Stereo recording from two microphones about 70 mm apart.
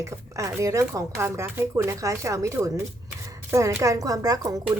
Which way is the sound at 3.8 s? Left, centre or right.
Right.